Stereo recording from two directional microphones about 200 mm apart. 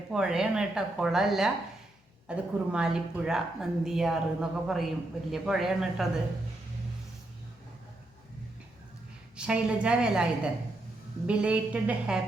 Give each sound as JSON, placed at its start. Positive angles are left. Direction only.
{"t": 0.1, "sound": "a woman's voice", "side_deg": -5}
{"t": 9.3, "sound": "a woman's voice", "side_deg": -5}